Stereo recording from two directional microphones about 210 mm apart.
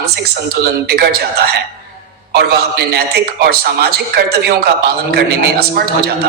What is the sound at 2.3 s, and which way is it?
Speech, 50° right (ahead or behind).